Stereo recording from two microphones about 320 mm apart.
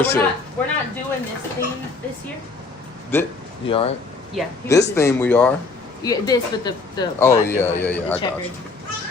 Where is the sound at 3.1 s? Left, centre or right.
Centre.